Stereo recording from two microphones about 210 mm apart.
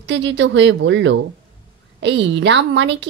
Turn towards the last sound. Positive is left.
turn(degrees=-60)  # may be behind; listen again after turning